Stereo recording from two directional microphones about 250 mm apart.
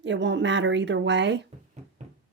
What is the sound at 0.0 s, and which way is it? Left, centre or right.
Speech, right.